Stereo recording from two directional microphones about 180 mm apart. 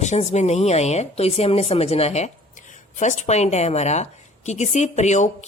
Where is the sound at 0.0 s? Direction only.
40° left (ahead or behind).